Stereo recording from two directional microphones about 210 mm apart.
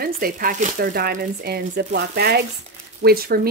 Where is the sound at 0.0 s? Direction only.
40° right (ahead or behind).